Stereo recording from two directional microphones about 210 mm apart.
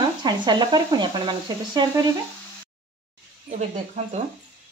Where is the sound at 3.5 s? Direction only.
30° right (ahead or behind).